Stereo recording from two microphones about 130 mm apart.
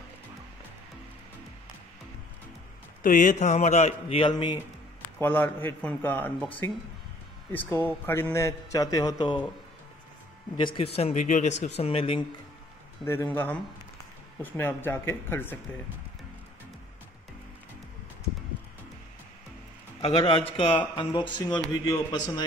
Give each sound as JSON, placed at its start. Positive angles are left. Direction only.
{"t": 3.0, "sound": "a man's voice", "side_deg": 90}
{"t": 5.2, "sound": "a man's voice", "side_deg": 15}
{"t": 7.8, "sound": "a man's voice", "side_deg": 20}
{"t": 10.6, "sound": "speech", "side_deg": 45}
{"t": 13.0, "sound": "a man's voice", "side_deg": 20}
{"t": 20.0, "sound": "a man's voice", "side_deg": 45}